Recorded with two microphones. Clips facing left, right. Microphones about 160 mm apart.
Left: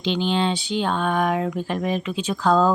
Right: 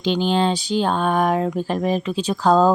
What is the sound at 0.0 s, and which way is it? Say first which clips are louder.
Speech: right 3 dB; 45° right (ahead or behind).